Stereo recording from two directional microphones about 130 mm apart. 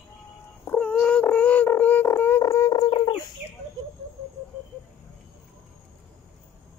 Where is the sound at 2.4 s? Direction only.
25° left (ahead or behind).